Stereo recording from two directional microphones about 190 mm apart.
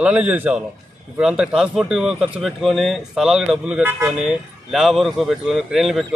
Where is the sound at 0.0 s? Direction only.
5° right (ahead or behind).